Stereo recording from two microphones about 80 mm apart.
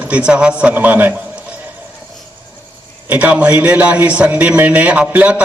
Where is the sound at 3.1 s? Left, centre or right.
Centre.